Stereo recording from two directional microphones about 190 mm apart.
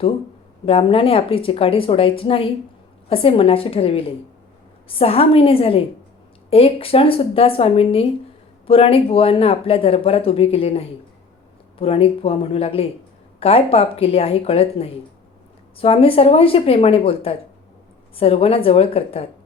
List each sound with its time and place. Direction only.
0.6 s speech: 30° left (ahead or behind)